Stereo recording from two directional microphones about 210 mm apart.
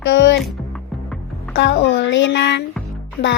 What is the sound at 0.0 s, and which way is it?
Music, 60° left (ahead or behind).